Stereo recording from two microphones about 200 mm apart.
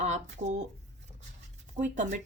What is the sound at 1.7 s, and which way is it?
Speech, 35° right (ahead or behind).